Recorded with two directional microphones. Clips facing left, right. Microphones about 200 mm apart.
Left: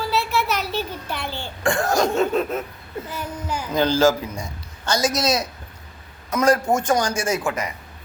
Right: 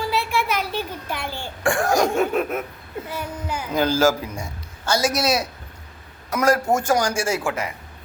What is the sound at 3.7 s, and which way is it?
A child's voice, 10° right (ahead or behind).